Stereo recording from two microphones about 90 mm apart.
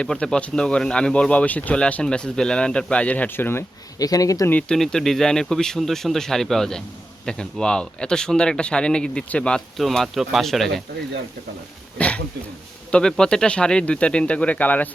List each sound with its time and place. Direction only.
0.0 s speech: 10° left (ahead or behind)
3.9 s speech: 45° left (ahead or behind)
4.7 s speech: 5° left (ahead or behind)
11.9 s speech: 15° left (ahead or behind)